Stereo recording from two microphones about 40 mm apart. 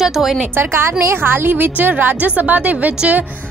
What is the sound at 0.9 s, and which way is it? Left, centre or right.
A woman's voice, right.